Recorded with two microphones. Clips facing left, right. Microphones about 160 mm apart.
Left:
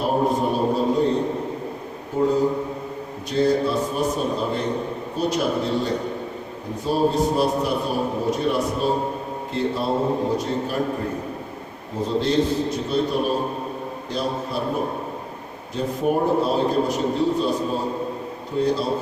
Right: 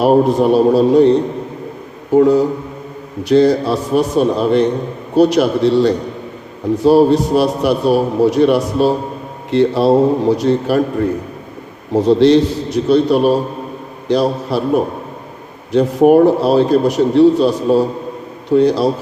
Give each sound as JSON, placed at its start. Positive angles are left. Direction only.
{"t": 0.0, "sound": "a man's voice", "side_deg": -80}
{"t": 2.1, "sound": "a man's voice", "side_deg": -75}
{"t": 11.9, "sound": "a man's voice", "side_deg": -80}